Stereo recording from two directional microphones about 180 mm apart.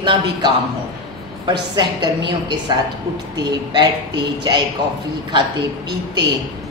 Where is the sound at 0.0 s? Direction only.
25° right (ahead or behind).